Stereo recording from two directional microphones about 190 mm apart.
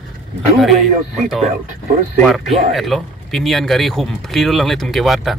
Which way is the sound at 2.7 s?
Centre (ahead or behind).